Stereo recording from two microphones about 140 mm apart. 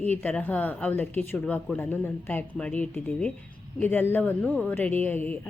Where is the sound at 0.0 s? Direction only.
10° left (ahead or behind).